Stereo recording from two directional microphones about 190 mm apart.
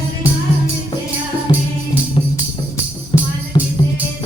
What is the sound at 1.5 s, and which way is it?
Music, 25° left (ahead or behind).